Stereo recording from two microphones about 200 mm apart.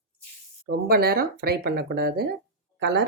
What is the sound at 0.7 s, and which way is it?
Speech, 50° right (ahead or behind).